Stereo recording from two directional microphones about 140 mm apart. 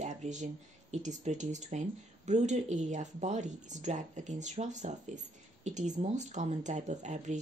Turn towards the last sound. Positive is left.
turn(degrees=-55)  # may be behind; listen again after turning